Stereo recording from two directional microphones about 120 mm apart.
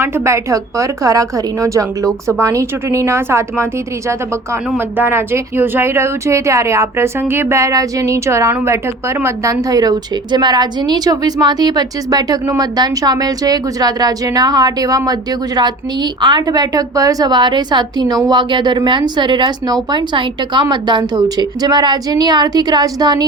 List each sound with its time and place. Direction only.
0.0 s speech: 25° right (ahead or behind)
4.9 s a woman's voice: 20° right (ahead or behind)
16.2 s a woman's voice: 35° right (ahead or behind)